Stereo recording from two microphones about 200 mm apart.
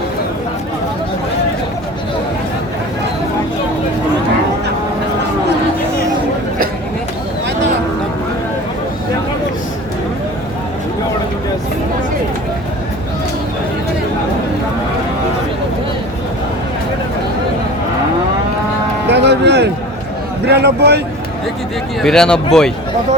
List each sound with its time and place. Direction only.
19.1 s music: 60° right (ahead or behind)
20.4 s a sound: 55° right (ahead or behind)
22.0 s speech: 5° left (ahead or behind)